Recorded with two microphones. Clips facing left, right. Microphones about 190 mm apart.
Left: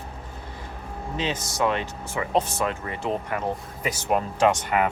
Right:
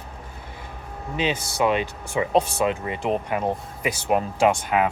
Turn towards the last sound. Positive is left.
turn(degrees=-15)  # may be behind; listen again after turning